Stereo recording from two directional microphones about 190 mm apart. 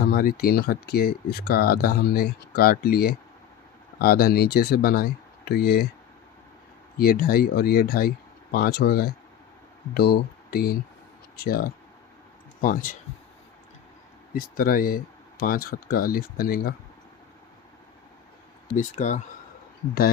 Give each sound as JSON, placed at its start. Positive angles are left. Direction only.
{"t": 0.0, "sound": "speech", "side_deg": 50}
{"t": 7.0, "sound": "speech", "side_deg": 50}
{"t": 14.3, "sound": "speech", "side_deg": 50}
{"t": 18.8, "sound": "speech", "side_deg": 40}